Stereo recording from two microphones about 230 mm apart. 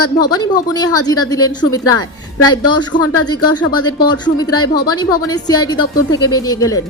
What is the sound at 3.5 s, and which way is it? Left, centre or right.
Speech, left.